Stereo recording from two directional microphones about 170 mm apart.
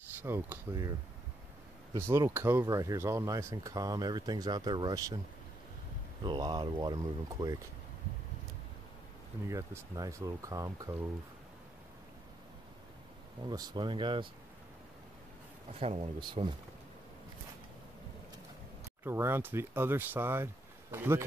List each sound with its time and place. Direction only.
0.2 s speech: 15° right (ahead or behind)
2.0 s speech: 15° right (ahead or behind)
6.2 s speech: 25° right (ahead or behind)
9.5 s speech: 20° right (ahead or behind)
13.5 s speech: 25° right (ahead or behind)
15.8 s speech: 35° right (ahead or behind)
19.0 s speech: 15° right (ahead or behind)